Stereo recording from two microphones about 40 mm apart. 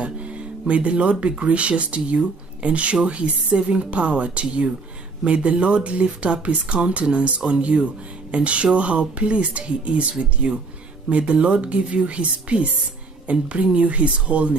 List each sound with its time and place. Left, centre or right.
0.0 s music: right
1.4 s speech: right
11.1 s speech: right